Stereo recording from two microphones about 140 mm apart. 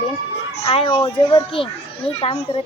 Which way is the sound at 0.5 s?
50° left (ahead or behind).